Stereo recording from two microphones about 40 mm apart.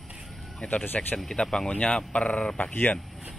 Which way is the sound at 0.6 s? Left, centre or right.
Left.